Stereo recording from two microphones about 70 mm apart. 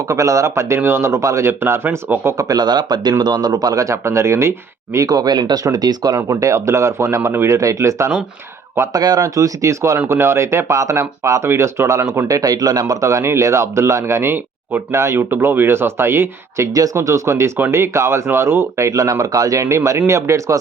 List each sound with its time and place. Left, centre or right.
0.1 s speech: right
2.4 s speech: right
4.9 s speech: right
5.6 s speech: right
6.2 s speech: right
8.9 s speech: right
9.2 s speech: right
12.4 s speech: right
16.7 s speech: right